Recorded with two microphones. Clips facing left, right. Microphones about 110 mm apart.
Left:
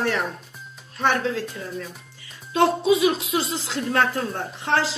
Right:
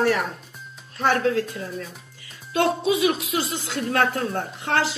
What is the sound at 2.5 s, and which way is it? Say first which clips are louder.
Speech: left 2 dB; 30° left (ahead or behind).